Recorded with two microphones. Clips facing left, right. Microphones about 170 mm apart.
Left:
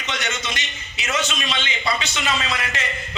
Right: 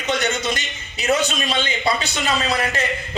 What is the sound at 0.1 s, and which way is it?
A man's voice, 35° right (ahead or behind).